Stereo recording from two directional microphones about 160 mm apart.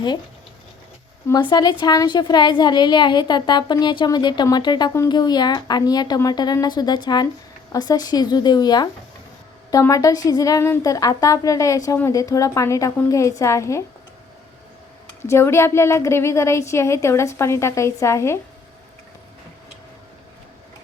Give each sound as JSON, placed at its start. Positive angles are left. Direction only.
{"t": 1.3, "sound": "a woman's voice", "side_deg": 25}
{"t": 15.2, "sound": "a woman's voice", "side_deg": 15}